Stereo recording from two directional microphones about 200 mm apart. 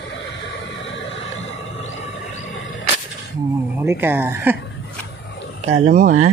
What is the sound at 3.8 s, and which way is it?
Speech, 10° right (ahead or behind).